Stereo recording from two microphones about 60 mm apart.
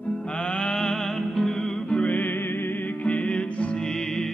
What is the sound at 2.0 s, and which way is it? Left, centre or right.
Music, left.